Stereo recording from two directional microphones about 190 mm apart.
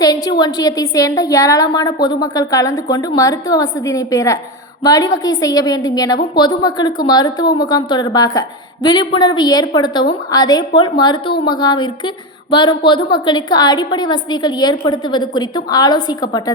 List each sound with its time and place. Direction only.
0.0 s a woman's voice: 20° left (ahead or behind)